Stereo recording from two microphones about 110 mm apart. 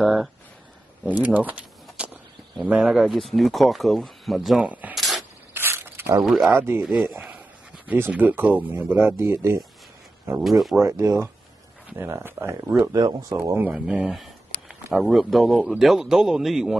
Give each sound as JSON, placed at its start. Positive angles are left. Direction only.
{"t": 0.0, "sound": "a sound", "side_deg": 0}
{"t": 1.0, "sound": "speech", "side_deg": -15}
{"t": 4.9, "sound": "a sound", "side_deg": 0}
{"t": 5.5, "sound": "a sound", "side_deg": -20}
{"t": 6.2, "sound": "speech", "side_deg": -5}
{"t": 6.5, "sound": "speech", "side_deg": -20}
{"t": 6.9, "sound": "speech", "side_deg": -10}
{"t": 10.4, "sound": "speech", "side_deg": 0}
{"t": 10.8, "sound": "speech", "side_deg": -25}
{"t": 13.7, "sound": "speech", "side_deg": -10}